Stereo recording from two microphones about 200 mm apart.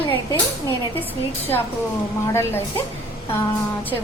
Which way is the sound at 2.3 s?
10° left (ahead or behind).